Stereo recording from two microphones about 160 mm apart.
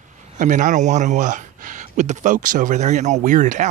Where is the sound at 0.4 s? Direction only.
50° right (ahead or behind).